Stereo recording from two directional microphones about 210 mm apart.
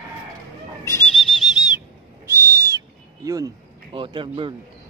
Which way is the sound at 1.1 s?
Centre (ahead or behind).